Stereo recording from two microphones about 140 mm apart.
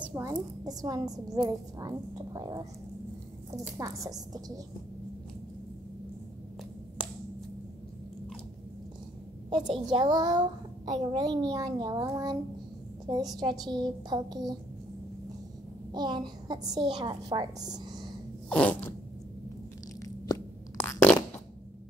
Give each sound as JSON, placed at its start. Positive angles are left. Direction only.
{"t": 0.1, "sound": "a woman's voice", "side_deg": -25}
{"t": 9.9, "sound": "a woman's voice", "side_deg": -30}
{"t": 15.9, "sound": "a woman's voice", "side_deg": -30}
{"t": 18.5, "sound": "a sound", "side_deg": 10}
{"t": 20.3, "sound": "a sound", "side_deg": 25}
{"t": 20.7, "sound": "fart", "side_deg": 15}